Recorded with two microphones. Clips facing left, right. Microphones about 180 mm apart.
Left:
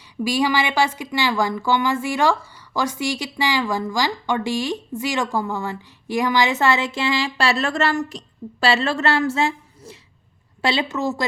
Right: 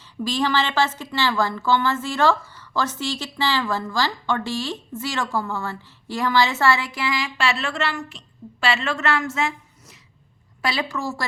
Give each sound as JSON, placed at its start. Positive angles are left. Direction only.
{"t": 0.3, "sound": "a woman's voice", "side_deg": 10}